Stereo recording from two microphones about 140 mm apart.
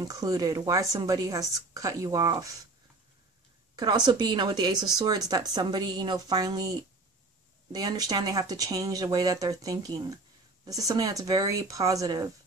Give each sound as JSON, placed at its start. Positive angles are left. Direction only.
{"t": 0.0, "sound": "speech", "side_deg": -25}
{"t": 3.7, "sound": "speech", "side_deg": -30}
{"t": 7.7, "sound": "speech", "side_deg": -30}